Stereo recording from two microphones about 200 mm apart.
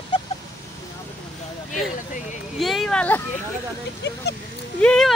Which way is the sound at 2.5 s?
Centre (ahead or behind).